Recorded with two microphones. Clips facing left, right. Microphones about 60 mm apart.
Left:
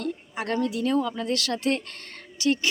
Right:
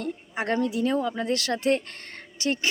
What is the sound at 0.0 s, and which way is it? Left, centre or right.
Speech, right.